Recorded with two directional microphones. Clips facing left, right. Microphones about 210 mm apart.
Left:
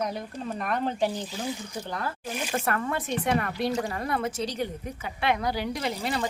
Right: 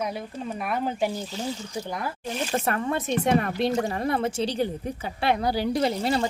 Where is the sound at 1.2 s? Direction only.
15° left (ahead or behind).